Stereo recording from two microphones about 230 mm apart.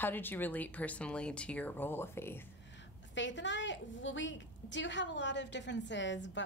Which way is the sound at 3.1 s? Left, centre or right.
Left.